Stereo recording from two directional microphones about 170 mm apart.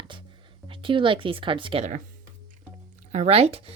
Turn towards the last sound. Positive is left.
turn(degrees=-35)  # may be behind; listen again after turning